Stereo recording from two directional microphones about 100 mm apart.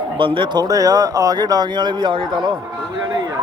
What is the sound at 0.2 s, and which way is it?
Speech, 60° right (ahead or behind).